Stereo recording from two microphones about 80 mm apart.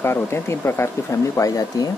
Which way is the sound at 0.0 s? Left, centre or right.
Left.